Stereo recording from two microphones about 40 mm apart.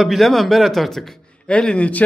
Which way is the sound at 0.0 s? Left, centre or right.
Centre.